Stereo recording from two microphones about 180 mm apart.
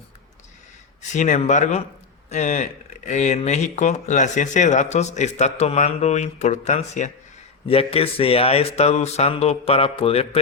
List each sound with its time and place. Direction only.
1.1 s speech: 40° left (ahead or behind)